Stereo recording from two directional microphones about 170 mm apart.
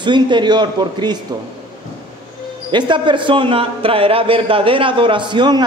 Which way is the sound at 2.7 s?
30° right (ahead or behind).